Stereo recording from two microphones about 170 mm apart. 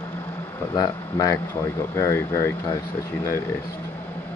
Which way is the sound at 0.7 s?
25° left (ahead or behind).